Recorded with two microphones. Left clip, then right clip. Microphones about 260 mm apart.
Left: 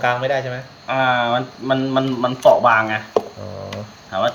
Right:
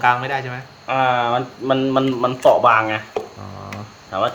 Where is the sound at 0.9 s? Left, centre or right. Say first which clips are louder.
Even; right.